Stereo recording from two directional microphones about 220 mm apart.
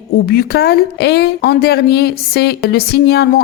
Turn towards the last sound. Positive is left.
turn(degrees=50)  # may be behind; listen again after turning